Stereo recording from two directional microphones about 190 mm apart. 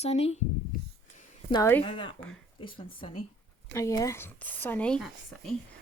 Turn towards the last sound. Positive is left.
turn(degrees=0)  # may be behind; listen again after turning